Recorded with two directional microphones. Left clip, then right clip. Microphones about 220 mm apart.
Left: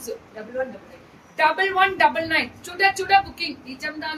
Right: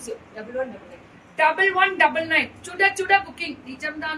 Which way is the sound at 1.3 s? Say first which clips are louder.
Even; 20° left (ahead or behind).